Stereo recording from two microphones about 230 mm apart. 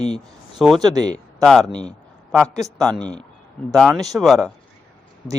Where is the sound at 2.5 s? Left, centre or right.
Centre.